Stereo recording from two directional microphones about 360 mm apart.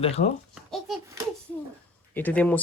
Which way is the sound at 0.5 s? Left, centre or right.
Centre.